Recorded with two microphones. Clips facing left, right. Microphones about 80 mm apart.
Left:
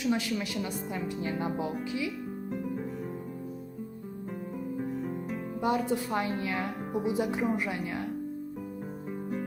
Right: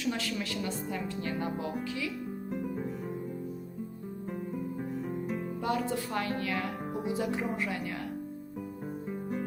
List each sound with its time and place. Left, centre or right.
0.0 s a woman's voice: centre
2.5 s music: centre
4.8 s music: centre
5.5 s a woman's voice: left